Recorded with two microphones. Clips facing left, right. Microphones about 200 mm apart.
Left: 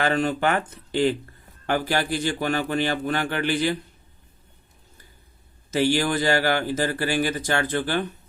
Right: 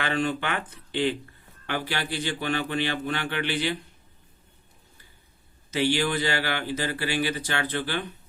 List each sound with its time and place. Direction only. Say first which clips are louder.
0.0 s a man's voice: left 5 dB; 40° left (ahead or behind)
5.7 s a man's voice: left 3 dB; 45° left (ahead or behind)